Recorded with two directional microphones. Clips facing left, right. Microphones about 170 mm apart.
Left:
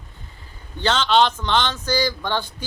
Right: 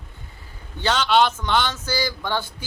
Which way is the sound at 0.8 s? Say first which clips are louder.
Left 1 dB; 10° right (ahead or behind).